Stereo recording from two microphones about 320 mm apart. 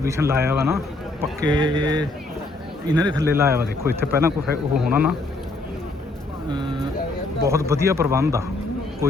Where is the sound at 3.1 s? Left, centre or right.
Centre.